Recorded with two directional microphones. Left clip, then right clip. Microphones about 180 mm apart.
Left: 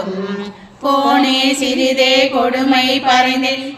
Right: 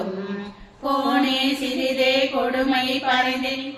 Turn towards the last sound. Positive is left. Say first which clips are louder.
# left 8 dB
turn(degrees=35)  # may be behind; listen again after turning